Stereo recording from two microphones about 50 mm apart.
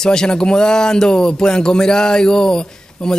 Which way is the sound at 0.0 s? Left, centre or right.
Centre.